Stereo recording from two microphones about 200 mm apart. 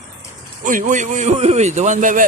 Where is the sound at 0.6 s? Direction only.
40° right (ahead or behind).